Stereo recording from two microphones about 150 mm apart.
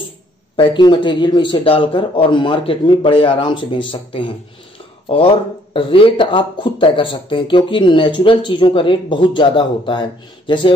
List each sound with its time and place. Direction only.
0.6 s speech: 30° left (ahead or behind)